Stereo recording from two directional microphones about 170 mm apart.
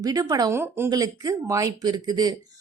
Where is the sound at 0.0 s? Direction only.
20° right (ahead or behind).